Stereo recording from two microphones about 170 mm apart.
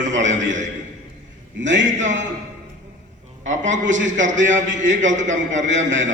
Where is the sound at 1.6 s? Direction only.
90° right.